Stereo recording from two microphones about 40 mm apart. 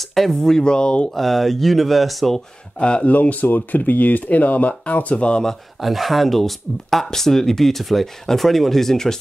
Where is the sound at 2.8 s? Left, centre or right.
Left.